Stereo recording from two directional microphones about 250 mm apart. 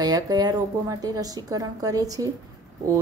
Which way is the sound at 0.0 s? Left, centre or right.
Centre.